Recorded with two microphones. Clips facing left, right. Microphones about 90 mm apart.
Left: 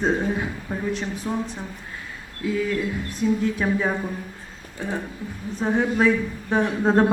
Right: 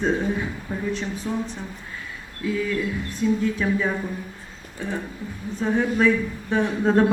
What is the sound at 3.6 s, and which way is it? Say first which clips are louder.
Speech: even; 25° left (ahead or behind).